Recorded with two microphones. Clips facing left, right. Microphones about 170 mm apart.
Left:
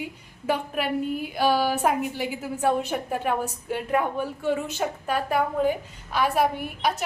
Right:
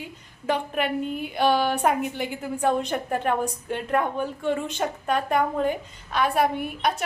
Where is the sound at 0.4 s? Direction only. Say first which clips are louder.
Right 1 dB; 5° left (ahead or behind).